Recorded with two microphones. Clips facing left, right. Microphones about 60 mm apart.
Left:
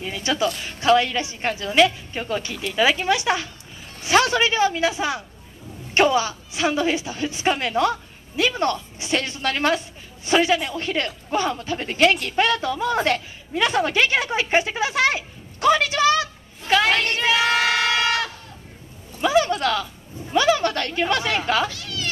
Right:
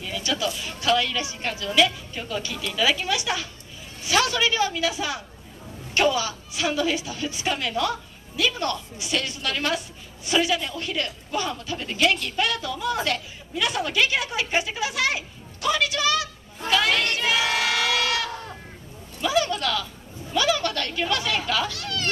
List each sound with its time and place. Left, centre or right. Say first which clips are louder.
0.0 s a sound: left 4 dB; left
0.7 s a woman's voice: left 5 dB; left
19.2 s a woman's voice: left 4 dB; left
21.7 s speech: right 1 dB; right